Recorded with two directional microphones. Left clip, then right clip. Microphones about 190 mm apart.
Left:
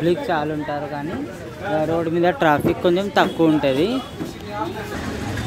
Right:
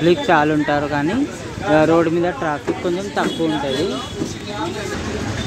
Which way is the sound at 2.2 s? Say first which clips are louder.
Left 4 dB; 25° left (ahead or behind).